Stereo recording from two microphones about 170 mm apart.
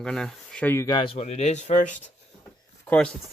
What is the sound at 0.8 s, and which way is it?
Speech, 25° left (ahead or behind).